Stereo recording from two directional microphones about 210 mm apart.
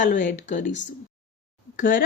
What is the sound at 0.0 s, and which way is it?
Speech, 40° left (ahead or behind).